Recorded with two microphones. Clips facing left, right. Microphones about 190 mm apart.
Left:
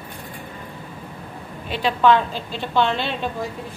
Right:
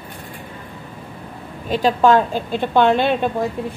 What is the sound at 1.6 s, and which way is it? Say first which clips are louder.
A woman's voice: right 3 dB; 40° right (ahead or behind).